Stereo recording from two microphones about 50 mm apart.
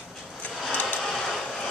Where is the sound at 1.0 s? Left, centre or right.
Centre.